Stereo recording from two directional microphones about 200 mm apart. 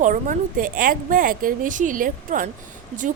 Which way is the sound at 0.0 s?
40° right (ahead or behind).